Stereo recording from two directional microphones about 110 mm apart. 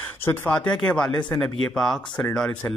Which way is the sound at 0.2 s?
20° left (ahead or behind).